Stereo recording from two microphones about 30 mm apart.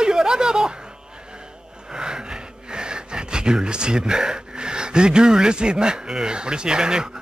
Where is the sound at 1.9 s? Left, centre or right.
Right.